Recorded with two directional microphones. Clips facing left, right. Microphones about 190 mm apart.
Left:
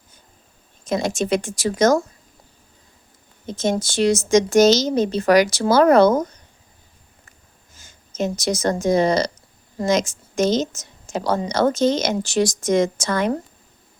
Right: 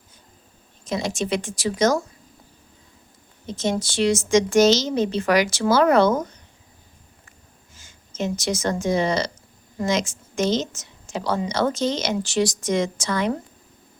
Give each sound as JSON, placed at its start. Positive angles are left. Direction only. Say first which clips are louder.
{"t": 0.9, "sound": "a woman's voice", "louder": "left 4 dB", "side_deg": 50}
{"t": 3.4, "sound": "a woman's voice", "louder": "left 3 dB", "side_deg": 50}
{"t": 7.8, "sound": "a woman's voice", "louder": "left 4 dB", "side_deg": 40}